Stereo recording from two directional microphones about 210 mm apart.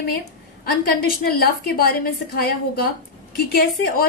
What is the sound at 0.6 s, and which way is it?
Speech, 45° left (ahead or behind).